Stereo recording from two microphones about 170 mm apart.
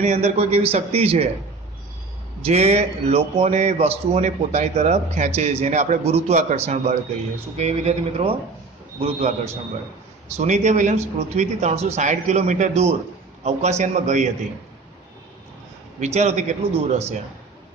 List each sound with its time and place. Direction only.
0.0 s a man's voice: 40° right (ahead or behind)
2.4 s a man's voice: 40° right (ahead or behind)
16.0 s a man's voice: 40° right (ahead or behind)